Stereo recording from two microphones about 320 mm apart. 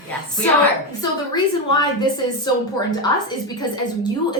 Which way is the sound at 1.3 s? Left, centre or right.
Centre.